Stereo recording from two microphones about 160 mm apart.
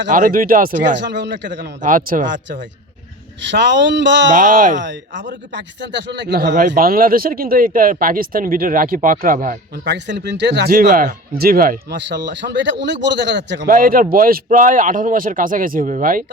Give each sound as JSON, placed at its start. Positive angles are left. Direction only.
{"t": 0.1, "sound": "speech", "side_deg": -60}
{"t": 1.0, "sound": "speech", "side_deg": -90}
{"t": 1.8, "sound": "speech", "side_deg": -55}
{"t": 3.5, "sound": "speech", "side_deg": -90}
{"t": 4.3, "sound": "speech", "side_deg": -50}
{"t": 4.8, "sound": "speech", "side_deg": -90}
{"t": 9.8, "sound": "speech", "side_deg": -90}